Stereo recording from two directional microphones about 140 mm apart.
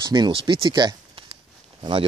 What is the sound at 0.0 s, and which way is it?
Speech, 30° right (ahead or behind).